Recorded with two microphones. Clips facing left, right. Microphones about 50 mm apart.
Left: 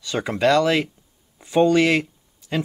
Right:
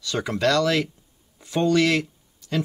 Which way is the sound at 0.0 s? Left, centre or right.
Centre.